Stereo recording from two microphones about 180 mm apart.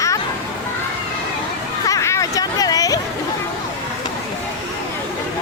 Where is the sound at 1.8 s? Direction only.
15° left (ahead or behind).